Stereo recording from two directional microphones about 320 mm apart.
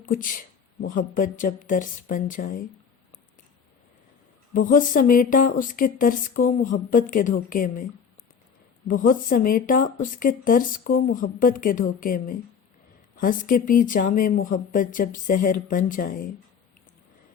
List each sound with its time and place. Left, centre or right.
0.0 s speech: left
4.5 s speech: left
8.9 s speech: left